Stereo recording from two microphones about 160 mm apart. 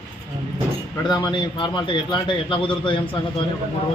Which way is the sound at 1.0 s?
25° left (ahead or behind).